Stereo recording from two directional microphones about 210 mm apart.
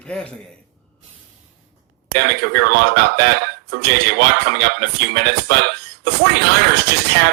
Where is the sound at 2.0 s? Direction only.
50° right (ahead or behind).